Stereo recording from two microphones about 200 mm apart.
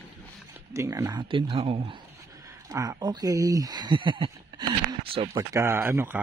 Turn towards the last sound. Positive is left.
turn(degrees=-10)  # may be behind; listen again after turning